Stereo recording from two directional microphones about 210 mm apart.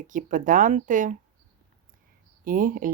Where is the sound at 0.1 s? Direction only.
40° right (ahead or behind).